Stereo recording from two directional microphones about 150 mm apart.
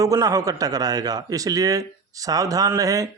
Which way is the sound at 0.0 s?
25° right (ahead or behind).